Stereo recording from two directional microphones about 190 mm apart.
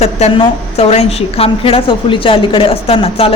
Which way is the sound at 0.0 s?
35° left (ahead or behind).